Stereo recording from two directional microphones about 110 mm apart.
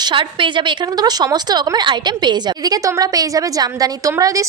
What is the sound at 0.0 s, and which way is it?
A woman's voice, 50° right (ahead or behind).